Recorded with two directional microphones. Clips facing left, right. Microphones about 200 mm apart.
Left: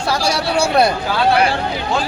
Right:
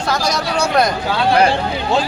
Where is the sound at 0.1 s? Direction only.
10° left (ahead or behind).